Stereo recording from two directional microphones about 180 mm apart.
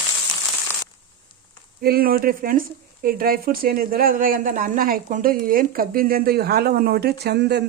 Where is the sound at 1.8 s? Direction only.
55° right (ahead or behind).